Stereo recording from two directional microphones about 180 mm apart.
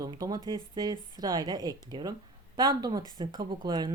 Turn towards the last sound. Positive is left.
turn(degrees=-25)  # may be behind; listen again after turning